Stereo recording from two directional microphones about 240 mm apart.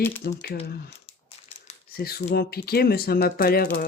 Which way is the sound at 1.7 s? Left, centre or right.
Left.